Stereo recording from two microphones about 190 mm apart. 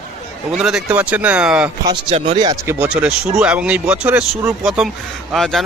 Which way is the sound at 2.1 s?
25° right (ahead or behind).